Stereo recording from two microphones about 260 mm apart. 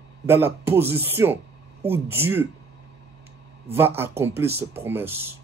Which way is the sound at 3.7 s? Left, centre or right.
Centre.